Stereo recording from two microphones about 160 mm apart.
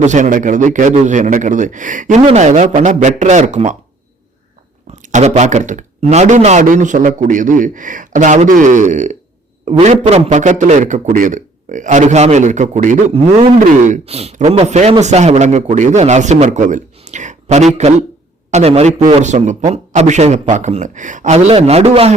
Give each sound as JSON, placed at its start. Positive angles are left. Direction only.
{"t": 0.0, "sound": "speech", "side_deg": -50}
{"t": 5.1, "sound": "speech", "side_deg": -45}
{"t": 9.6, "sound": "speech", "side_deg": -40}